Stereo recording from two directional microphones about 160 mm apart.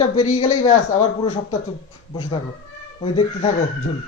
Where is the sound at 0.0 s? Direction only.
45° left (ahead or behind).